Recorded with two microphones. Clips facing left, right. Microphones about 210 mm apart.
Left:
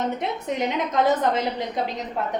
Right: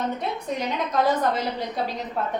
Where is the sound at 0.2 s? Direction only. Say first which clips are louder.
Left 2 dB; 20° left (ahead or behind).